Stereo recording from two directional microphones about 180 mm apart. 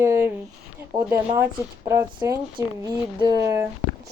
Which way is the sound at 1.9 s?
15° right (ahead or behind).